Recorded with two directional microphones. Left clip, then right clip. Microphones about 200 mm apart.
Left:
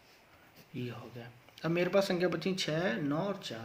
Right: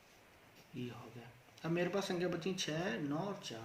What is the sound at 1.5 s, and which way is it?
Speech, 40° left (ahead or behind).